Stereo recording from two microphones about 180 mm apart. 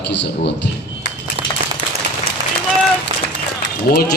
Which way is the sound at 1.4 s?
30° right (ahead or behind).